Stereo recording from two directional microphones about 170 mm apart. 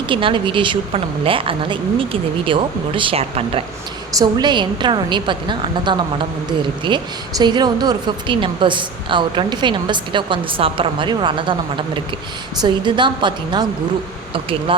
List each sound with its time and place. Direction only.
0.1 s a woman's voice: 30° right (ahead or behind)
14.7 s speech: 30° right (ahead or behind)